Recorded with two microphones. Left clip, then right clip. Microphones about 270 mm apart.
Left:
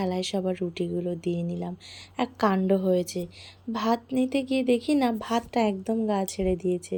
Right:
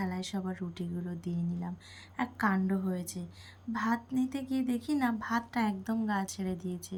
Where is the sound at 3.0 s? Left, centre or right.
Centre.